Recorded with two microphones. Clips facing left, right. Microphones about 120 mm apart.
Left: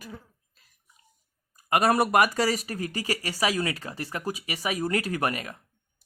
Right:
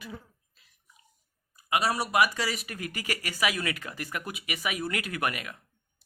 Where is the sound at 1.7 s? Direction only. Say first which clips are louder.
Left 5 dB; 50° left (ahead or behind); by 5.6 s 35° left (ahead or behind).